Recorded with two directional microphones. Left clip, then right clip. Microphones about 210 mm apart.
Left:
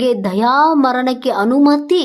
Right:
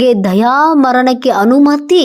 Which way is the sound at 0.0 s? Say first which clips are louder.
Right 5 dB; 20° right (ahead or behind).